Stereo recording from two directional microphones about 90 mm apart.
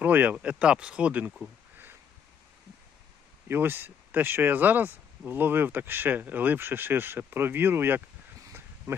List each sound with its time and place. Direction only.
0.0 s speech: 20° right (ahead or behind)
3.5 s speech: 25° right (ahead or behind)